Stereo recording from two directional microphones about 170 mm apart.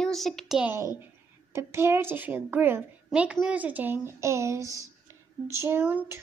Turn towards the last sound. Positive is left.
turn(degrees=-10)  # may be behind; listen again after turning